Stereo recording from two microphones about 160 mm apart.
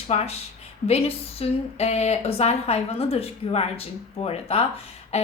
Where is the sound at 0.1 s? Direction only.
40° left (ahead or behind).